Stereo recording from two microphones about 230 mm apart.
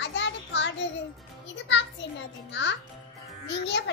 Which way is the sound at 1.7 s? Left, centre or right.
Left.